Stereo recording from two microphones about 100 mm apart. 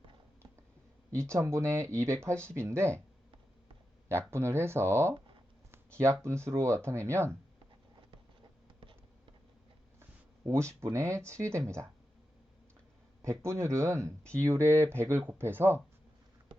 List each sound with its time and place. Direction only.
1.1 s speech: 30° right (ahead or behind)
4.3 s speech: 25° right (ahead or behind)
8.1 s a sound: 55° right (ahead or behind)
10.4 s speech: 30° right (ahead or behind)
13.4 s speech: 30° right (ahead or behind)